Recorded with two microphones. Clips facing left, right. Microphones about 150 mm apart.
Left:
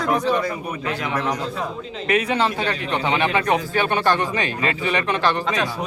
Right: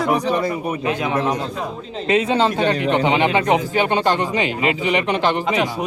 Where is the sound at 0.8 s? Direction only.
25° right (ahead or behind).